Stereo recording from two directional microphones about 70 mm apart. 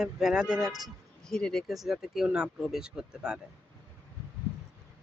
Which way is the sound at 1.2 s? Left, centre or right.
Centre.